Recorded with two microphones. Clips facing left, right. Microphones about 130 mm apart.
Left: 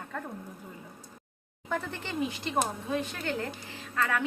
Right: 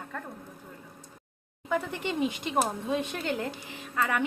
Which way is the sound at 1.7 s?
15° right (ahead or behind).